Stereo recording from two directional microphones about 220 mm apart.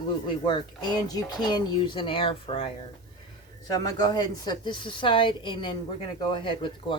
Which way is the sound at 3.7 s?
15° left (ahead or behind).